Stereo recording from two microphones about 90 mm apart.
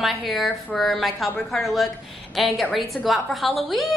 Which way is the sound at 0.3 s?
Centre (ahead or behind).